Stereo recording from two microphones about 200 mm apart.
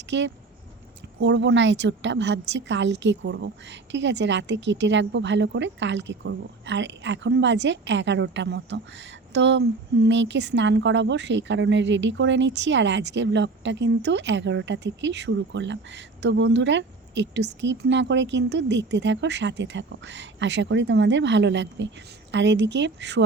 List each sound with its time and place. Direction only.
0.1 s a woman's voice: 65° right (ahead or behind)